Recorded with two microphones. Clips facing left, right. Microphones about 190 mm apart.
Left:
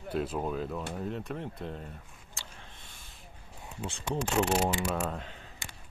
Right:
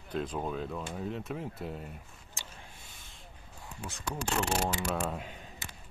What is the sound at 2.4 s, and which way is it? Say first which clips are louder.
Vehicle: even; 15° right (ahead or behind).